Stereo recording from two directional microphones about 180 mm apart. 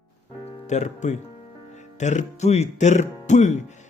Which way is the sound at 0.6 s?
40° left (ahead or behind).